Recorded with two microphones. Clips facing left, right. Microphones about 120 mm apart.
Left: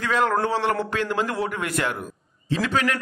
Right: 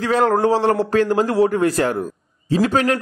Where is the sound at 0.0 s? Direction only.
40° right (ahead or behind).